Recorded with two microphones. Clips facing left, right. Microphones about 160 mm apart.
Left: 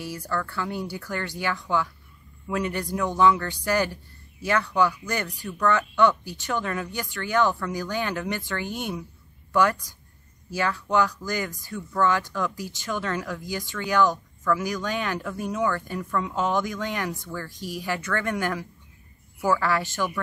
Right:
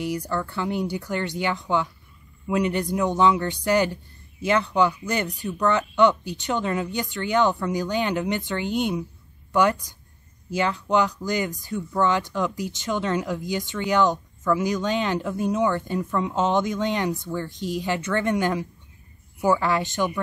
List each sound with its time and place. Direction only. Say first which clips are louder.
0.0 s speech: right 4 dB; 20° right (ahead or behind)